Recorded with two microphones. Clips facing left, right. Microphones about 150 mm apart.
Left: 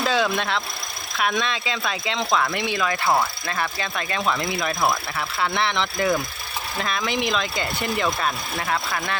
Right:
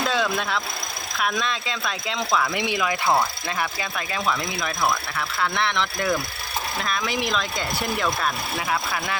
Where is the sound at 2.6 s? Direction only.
15° right (ahead or behind).